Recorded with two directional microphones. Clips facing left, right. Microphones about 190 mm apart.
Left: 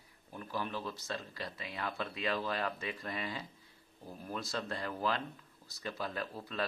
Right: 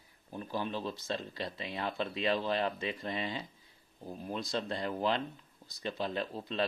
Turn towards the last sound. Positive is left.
turn(degrees=-25)  # may be behind; listen again after turning